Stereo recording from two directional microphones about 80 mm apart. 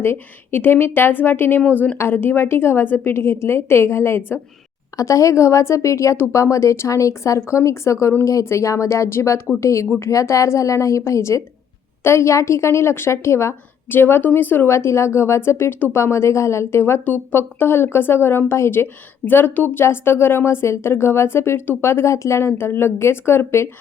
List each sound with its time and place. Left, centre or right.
0.0 s a woman's voice: left